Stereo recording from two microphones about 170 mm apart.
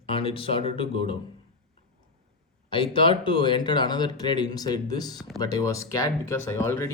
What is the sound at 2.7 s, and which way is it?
Speech, 30° left (ahead or behind).